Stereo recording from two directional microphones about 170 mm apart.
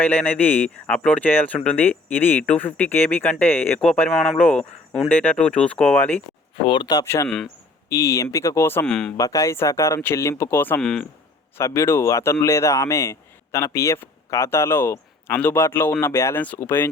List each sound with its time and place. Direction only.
0.0 s speech: 10° left (ahead or behind)
6.7 s speech: 25° left (ahead or behind)
7.3 s speech: 5° left (ahead or behind)
7.9 s speech: 15° left (ahead or behind)
9.1 s speech: 20° left (ahead or behind); by 11.0 s 5° left (ahead or behind)
11.5 s speech: 15° left (ahead or behind)